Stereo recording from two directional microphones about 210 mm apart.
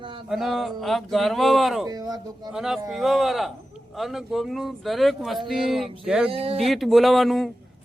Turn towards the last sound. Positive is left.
turn(degrees=0)  # may be behind; listen again after turning